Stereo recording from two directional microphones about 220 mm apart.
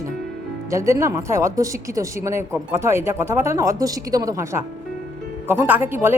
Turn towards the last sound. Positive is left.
turn(degrees=-10)  # may be behind; listen again after turning